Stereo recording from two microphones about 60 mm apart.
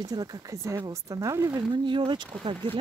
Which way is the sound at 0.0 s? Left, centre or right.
Right.